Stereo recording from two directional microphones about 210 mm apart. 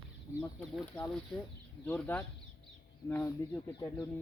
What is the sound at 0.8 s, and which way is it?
Speech, 5° left (ahead or behind).